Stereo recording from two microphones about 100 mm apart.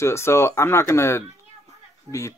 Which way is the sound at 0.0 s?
25° left (ahead or behind).